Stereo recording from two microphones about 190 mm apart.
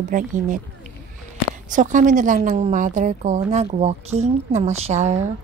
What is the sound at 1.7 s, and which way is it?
A woman's voice, 40° right (ahead or behind).